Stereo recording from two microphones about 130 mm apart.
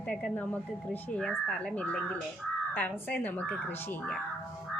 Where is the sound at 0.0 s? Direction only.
5° left (ahead or behind).